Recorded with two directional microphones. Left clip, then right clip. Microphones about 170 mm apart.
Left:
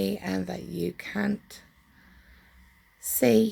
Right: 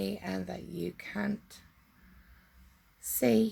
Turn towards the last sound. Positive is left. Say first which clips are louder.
# left 6 dB
turn(degrees=30)  # may be behind; listen again after turning